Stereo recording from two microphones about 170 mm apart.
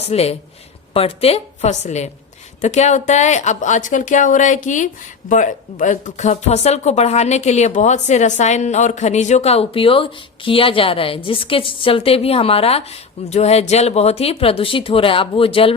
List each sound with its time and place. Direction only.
0.1 s a woman's voice: 35° left (ahead or behind)